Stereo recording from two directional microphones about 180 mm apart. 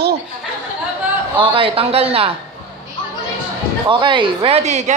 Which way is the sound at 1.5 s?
30° right (ahead or behind).